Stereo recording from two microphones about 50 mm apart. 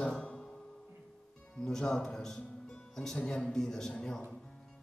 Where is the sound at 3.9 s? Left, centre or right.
Centre.